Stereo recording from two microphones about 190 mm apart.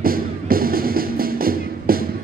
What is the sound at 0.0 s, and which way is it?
Music, 50° right (ahead or behind).